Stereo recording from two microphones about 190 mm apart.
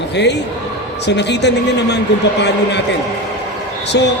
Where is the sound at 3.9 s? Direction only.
70° left (ahead or behind).